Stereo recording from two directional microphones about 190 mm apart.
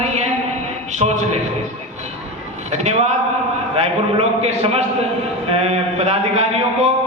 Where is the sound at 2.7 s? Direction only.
35° right (ahead or behind).